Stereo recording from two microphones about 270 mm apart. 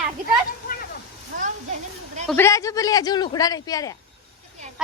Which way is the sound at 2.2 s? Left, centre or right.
Centre.